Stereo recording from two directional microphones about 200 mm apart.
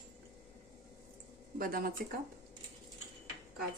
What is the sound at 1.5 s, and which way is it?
Speech, 45° right (ahead or behind).